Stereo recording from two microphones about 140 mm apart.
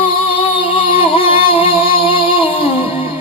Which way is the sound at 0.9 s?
40° left (ahead or behind).